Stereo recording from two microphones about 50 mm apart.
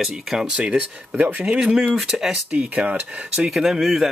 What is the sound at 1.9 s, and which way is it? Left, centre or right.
Speech, centre.